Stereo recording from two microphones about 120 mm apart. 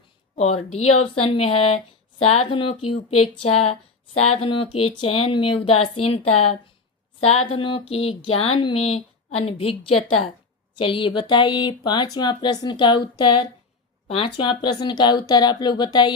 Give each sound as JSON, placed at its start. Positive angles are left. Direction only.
{"t": 0.3, "sound": "a woman's voice", "side_deg": 65}